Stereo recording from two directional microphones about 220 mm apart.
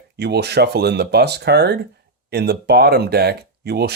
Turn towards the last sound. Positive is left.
turn(degrees=-45)  # may be behind; listen again after turning